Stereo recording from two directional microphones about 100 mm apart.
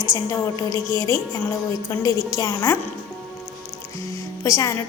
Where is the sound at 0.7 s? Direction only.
40° right (ahead or behind).